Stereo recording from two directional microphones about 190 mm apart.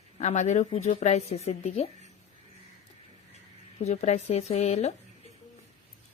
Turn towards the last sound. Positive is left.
turn(degrees=35)  # may be behind; listen again after turning